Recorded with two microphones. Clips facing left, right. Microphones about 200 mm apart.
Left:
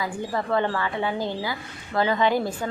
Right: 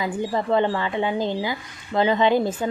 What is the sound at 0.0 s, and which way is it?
Speech, 20° right (ahead or behind).